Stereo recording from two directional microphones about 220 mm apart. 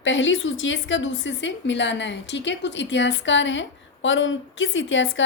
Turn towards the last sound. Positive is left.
turn(degrees=60)  # may be behind; listen again after turning